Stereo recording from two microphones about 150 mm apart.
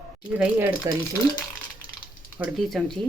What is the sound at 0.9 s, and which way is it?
Speech, 20° right (ahead or behind).